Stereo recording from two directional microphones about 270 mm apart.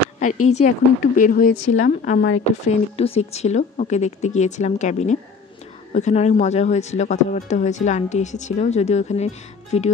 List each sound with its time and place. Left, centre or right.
0.5 s speech: left